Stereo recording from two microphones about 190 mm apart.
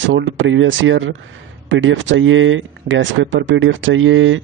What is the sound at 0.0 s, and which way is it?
Speech, 85° right.